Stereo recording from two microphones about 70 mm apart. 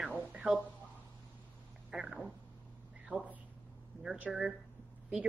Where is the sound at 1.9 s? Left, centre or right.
Centre.